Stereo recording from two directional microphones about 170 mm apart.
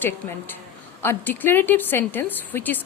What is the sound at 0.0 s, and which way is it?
A woman's voice, 10° left (ahead or behind).